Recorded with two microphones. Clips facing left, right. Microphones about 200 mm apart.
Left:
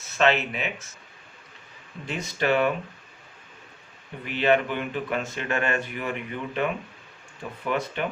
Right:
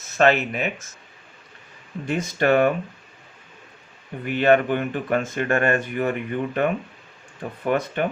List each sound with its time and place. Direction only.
0.2 s speech: 45° right (ahead or behind)
2.0 s speech: 50° right (ahead or behind)
4.3 s speech: 50° right (ahead or behind)